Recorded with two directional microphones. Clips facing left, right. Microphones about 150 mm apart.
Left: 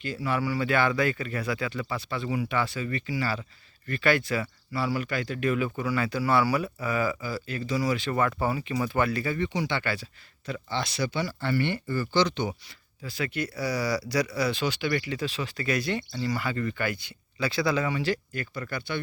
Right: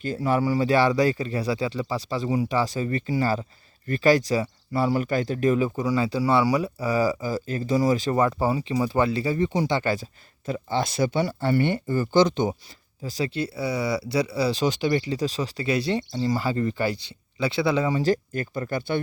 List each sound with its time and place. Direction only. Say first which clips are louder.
0.0 s speech: right 5 dB; 45° right (ahead or behind)
8.1 s speech: right 4 dB; 20° right (ahead or behind)
9.5 s speech: right 5 dB; 40° right (ahead or behind)
13.1 s speech: right 4 dB; 35° right (ahead or behind)
17.9 s speech: right 6 dB; 40° right (ahead or behind)